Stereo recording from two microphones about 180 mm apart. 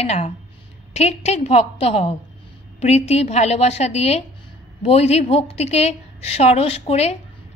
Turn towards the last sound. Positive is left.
turn(degrees=35)  # may be behind; listen again after turning